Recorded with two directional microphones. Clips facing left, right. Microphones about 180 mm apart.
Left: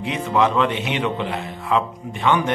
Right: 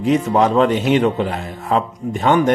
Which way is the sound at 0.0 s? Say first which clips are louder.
Right 5 dB; 40° right (ahead or behind).